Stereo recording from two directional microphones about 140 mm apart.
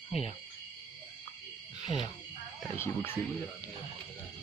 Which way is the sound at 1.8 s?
35° left (ahead or behind).